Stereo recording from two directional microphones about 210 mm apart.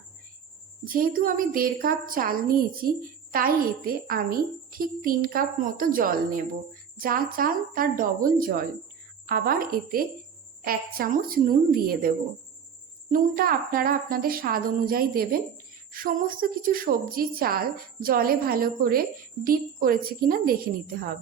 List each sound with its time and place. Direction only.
0.9 s a woman's voice: 40° right (ahead or behind)